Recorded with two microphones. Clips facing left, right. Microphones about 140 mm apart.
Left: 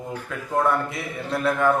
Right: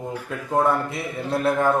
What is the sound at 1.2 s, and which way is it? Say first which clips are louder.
Speech: right 1 dB; 30° right (ahead or behind).